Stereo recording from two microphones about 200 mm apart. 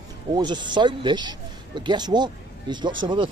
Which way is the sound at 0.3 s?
20° right (ahead or behind).